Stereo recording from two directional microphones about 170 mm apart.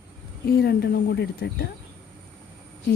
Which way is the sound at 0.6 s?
75° left (ahead or behind).